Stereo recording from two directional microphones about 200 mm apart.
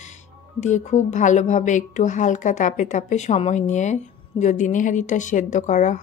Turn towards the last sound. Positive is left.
turn(degrees=40)  # may be behind; listen again after turning